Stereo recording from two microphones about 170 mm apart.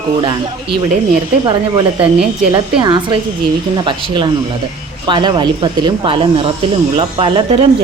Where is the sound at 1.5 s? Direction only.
30° right (ahead or behind).